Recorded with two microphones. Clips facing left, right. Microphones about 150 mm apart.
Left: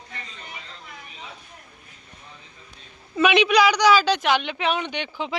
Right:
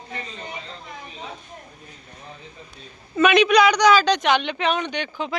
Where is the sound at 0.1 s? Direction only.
25° right (ahead or behind).